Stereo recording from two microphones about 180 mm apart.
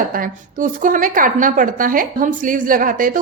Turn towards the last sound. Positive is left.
turn(degrees=-50)  # may be behind; listen again after turning